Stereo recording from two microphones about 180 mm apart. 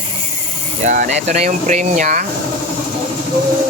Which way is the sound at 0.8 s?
45° right (ahead or behind).